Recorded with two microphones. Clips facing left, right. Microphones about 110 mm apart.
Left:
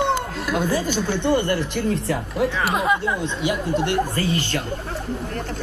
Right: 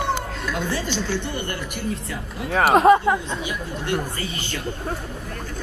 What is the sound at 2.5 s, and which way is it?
Speech, 65° right (ahead or behind).